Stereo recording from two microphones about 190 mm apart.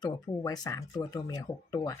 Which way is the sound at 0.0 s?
20° left (ahead or behind).